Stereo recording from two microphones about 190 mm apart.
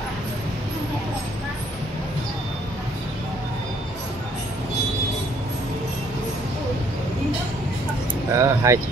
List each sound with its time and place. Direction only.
8.3 s speech: 15° right (ahead or behind)